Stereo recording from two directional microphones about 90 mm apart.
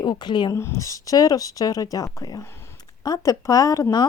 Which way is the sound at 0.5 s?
30° left (ahead or behind).